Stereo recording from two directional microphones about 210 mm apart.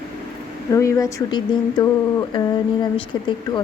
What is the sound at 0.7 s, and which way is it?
Speech, 15° left (ahead or behind).